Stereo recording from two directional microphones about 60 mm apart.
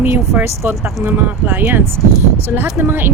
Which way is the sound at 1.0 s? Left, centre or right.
Right.